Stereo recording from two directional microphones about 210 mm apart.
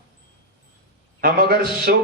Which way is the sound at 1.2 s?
45° right (ahead or behind).